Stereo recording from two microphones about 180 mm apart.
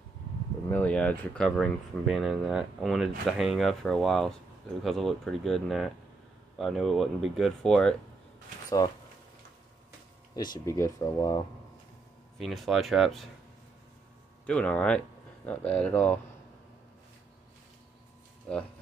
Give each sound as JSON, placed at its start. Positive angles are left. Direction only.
{"t": 0.7, "sound": "speech", "side_deg": 10}
{"t": 8.6, "sound": "speech", "side_deg": 20}
{"t": 10.3, "sound": "speech", "side_deg": 20}
{"t": 12.4, "sound": "speech", "side_deg": 0}
{"t": 14.4, "sound": "speech", "side_deg": 5}